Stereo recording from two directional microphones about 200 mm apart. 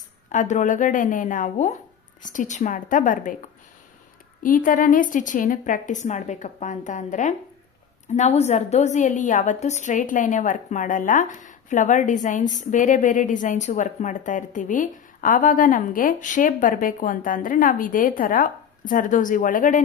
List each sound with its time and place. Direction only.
0.3 s a woman's voice: 40° left (ahead or behind)
4.4 s a woman's voice: 40° left (ahead or behind)